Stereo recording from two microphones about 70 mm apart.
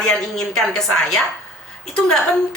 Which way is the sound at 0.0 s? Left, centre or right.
Centre.